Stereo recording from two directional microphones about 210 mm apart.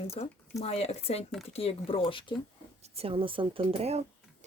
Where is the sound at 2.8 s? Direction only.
30° right (ahead or behind).